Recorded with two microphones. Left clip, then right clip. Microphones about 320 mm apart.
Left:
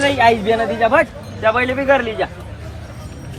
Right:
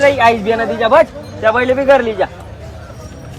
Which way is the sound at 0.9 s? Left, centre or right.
Right.